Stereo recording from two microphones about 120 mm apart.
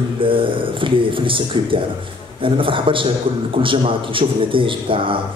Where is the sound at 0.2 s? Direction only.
45° right (ahead or behind).